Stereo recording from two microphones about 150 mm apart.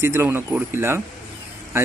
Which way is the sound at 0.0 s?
15° right (ahead or behind).